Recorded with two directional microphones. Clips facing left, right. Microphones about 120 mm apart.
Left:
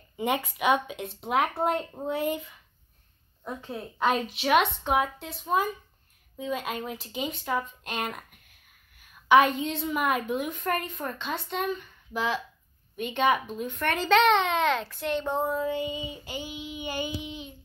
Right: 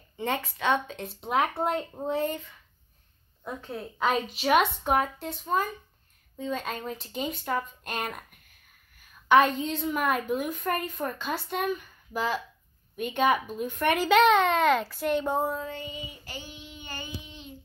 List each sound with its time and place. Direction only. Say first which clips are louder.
0.2 s child singing: left 2 dB; 15° left (ahead or behind)
1.0 s a woman's voice: even; centre (ahead or behind)
2.2 s child singing: left 2 dB; 10° left (ahead or behind)
3.4 s a woman's voice: even; centre (ahead or behind)
15.7 s child singing: left 7 dB; 20° left (ahead or behind)